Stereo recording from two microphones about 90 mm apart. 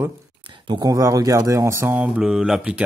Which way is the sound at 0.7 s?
45° right (ahead or behind).